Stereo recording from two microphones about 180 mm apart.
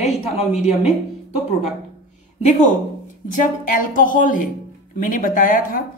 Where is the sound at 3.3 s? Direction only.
45° left (ahead or behind).